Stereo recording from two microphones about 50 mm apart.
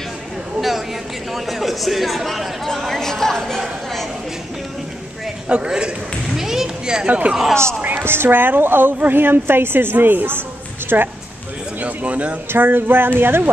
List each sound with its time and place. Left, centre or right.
0.6 s a sound: centre
1.3 s speech: centre
5.5 s a sound: centre
7.1 s a man's voice: right
8.0 s a woman's voice: right
11.8 s a man's voice: right
12.5 s a woman's voice: right